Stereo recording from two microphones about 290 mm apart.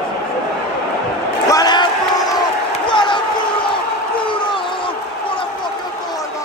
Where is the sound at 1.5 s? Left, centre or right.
Centre.